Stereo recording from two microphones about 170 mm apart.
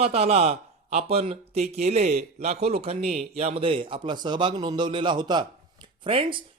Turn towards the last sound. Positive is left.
turn(degrees=-30)  # may be behind; listen again after turning